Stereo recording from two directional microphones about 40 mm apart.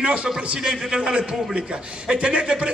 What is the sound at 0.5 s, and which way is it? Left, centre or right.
A man's voice, centre.